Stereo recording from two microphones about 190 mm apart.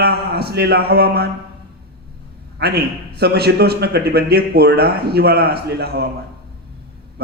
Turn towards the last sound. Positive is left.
turn(degrees=-55)  # may be behind; listen again after turning